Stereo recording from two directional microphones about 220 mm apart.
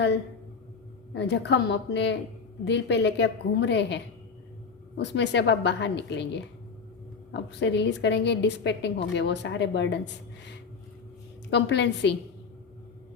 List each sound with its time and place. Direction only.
1.1 s a woman's voice: 50° left (ahead or behind)
11.5 s a woman's voice: 50° left (ahead or behind)